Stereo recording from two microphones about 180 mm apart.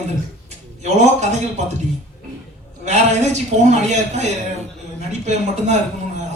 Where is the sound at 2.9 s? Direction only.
40° right (ahead or behind).